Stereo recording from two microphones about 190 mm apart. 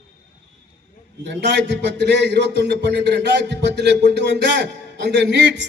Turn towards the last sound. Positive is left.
turn(degrees=-65)  # may be behind; listen again after turning